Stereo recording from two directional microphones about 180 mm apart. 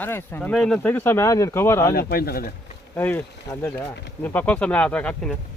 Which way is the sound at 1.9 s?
55° left (ahead or behind).